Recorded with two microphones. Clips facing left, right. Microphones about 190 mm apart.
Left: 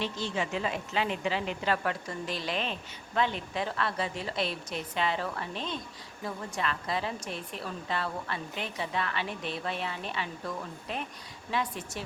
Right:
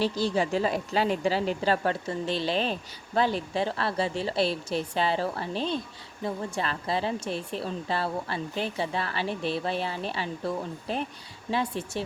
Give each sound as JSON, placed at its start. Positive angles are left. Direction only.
{"t": 0.0, "sound": "a woman's voice", "side_deg": -35}